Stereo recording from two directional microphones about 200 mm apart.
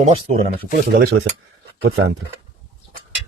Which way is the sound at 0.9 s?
55° right (ahead or behind).